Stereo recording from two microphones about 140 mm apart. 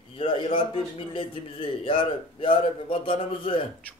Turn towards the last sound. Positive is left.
turn(degrees=40)  # may be behind; listen again after turning